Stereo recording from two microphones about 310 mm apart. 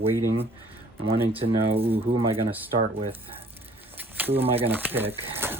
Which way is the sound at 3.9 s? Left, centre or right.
Centre.